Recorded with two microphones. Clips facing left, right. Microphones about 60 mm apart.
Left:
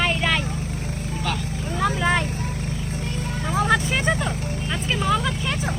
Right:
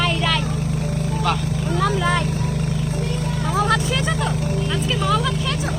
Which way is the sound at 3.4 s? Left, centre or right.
Left.